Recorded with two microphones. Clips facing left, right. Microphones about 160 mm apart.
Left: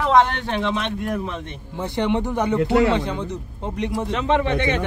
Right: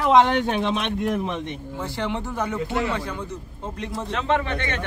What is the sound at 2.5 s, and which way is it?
Speech, 75° left (ahead or behind).